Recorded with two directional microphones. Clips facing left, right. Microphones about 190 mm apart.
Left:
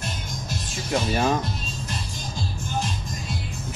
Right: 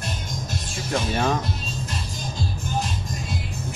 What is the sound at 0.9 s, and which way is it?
Speech, centre (ahead or behind).